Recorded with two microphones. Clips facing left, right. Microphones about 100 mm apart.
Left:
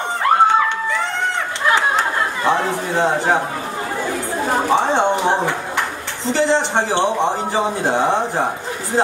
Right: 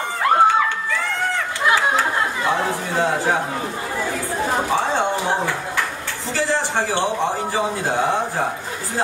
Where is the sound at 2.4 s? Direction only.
20° left (ahead or behind).